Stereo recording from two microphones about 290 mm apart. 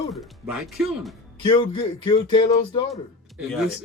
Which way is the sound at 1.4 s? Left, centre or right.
Centre.